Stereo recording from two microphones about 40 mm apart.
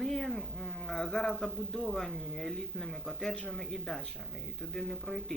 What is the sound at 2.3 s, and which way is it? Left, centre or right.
Speech, centre.